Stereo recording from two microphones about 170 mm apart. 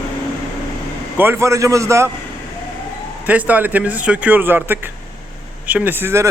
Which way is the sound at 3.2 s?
10° right (ahead or behind).